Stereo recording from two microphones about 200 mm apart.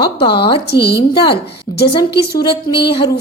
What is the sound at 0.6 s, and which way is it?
Speech, 55° left (ahead or behind).